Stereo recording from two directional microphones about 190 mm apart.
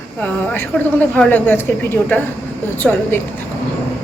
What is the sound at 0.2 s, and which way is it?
A woman's voice, 10° left (ahead or behind).